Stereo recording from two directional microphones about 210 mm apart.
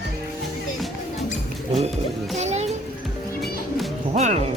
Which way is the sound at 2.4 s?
30° right (ahead or behind).